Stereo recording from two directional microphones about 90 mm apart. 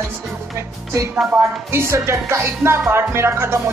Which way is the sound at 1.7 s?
30° right (ahead or behind).